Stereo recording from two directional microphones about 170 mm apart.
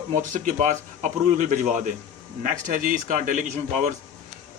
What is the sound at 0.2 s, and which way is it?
Speech, 50° right (ahead or behind).